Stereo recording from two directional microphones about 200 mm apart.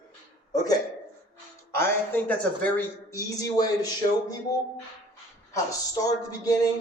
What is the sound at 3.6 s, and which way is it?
Speech, 20° left (ahead or behind).